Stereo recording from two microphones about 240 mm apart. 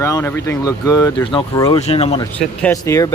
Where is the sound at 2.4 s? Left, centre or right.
Centre.